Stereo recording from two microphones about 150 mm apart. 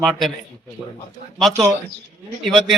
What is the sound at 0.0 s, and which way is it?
Speech, centre (ahead or behind).